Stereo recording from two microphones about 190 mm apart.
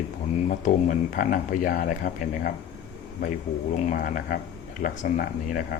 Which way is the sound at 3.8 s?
45° left (ahead or behind).